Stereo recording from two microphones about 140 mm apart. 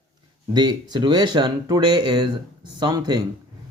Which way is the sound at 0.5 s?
30° right (ahead or behind).